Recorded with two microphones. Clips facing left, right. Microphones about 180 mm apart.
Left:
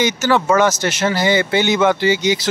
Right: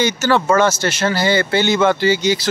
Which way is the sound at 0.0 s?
15° left (ahead or behind).